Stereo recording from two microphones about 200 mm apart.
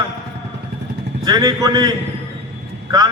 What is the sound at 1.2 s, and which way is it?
Speech, 20° right (ahead or behind).